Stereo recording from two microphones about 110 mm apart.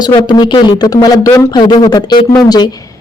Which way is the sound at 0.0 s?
40° left (ahead or behind).